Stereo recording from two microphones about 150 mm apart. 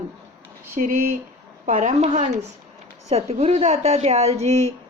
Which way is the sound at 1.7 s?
55° right (ahead or behind).